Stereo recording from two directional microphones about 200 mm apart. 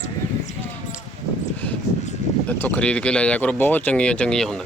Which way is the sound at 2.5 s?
10° left (ahead or behind).